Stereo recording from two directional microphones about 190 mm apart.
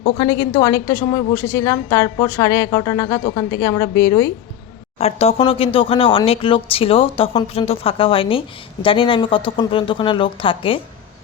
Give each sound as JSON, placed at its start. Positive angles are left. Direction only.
{"t": 0.0, "sound": "a woman's voice", "side_deg": 25}
{"t": 4.9, "sound": "speech", "side_deg": 35}